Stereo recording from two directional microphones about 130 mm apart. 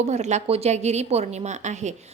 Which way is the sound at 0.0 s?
60° right (ahead or behind).